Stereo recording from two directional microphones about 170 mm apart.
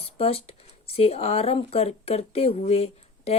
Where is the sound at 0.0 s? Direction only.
35° left (ahead or behind).